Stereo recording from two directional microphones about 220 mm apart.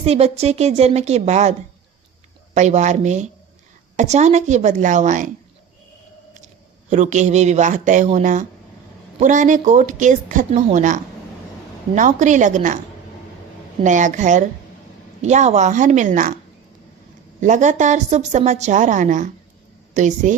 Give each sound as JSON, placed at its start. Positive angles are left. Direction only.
{"t": 0.0, "sound": "a woman's voice", "side_deg": -30}
{"t": 2.6, "sound": "a woman's voice", "side_deg": -30}
{"t": 6.9, "sound": "a woman's voice", "side_deg": -35}
{"t": 13.8, "sound": "a woman's voice", "side_deg": -35}
{"t": 17.4, "sound": "a woman's voice", "side_deg": -35}